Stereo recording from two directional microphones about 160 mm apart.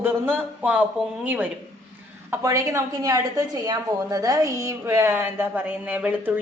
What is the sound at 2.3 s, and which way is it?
A woman's voice, 20° right (ahead or behind).